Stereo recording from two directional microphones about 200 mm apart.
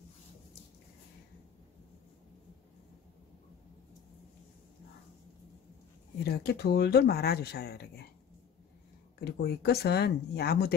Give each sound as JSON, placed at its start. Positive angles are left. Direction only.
{"t": 6.2, "sound": "speech", "side_deg": 55}
{"t": 9.2, "sound": "speech", "side_deg": 55}